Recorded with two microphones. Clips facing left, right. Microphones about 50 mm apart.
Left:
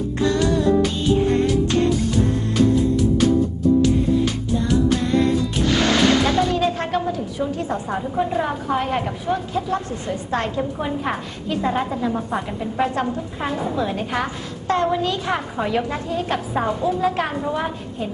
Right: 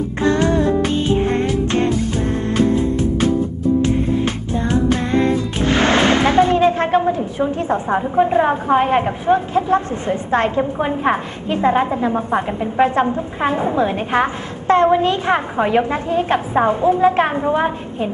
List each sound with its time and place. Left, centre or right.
0.2 s music: right
4.5 s music: right
14.7 s a woman's voice: right